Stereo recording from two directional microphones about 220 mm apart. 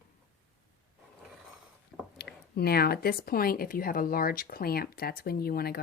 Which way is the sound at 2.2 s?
45° left (ahead or behind).